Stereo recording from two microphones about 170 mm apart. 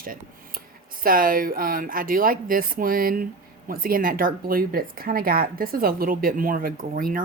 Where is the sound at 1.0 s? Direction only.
55° right (ahead or behind).